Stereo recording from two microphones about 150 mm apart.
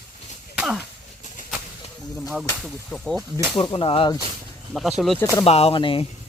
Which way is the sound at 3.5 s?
40° left (ahead or behind).